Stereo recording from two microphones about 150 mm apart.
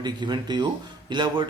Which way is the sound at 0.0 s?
30° right (ahead or behind).